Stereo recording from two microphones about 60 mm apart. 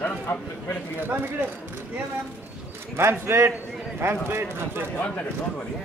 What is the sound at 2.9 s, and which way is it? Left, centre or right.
A man's voice, right.